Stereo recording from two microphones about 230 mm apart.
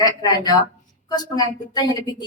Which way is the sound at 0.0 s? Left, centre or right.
Centre.